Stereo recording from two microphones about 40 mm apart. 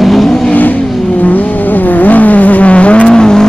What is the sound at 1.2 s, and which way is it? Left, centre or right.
Vehicle, left.